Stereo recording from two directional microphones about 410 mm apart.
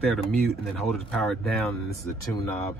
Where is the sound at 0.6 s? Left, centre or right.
Centre.